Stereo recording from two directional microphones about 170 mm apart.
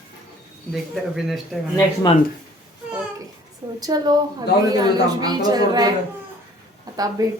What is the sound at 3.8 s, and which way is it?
A woman's voice, 25° right (ahead or behind).